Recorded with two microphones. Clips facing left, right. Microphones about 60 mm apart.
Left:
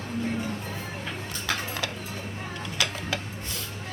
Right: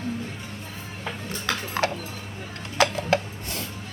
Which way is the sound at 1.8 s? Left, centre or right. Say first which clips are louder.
Right 8 dB; right.